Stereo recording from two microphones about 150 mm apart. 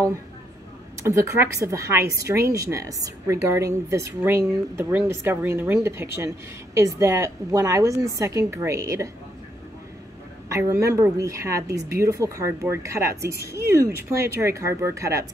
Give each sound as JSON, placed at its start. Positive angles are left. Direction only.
{"t": 1.0, "sound": "speech", "side_deg": -20}
{"t": 10.5, "sound": "speech", "side_deg": -20}